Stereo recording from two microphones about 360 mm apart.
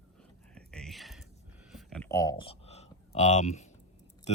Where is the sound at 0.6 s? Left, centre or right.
Centre.